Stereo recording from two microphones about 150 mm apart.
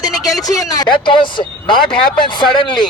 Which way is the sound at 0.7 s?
30° left (ahead or behind).